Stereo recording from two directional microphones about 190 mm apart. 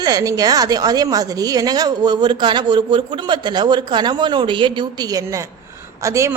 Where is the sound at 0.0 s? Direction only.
20° right (ahead or behind).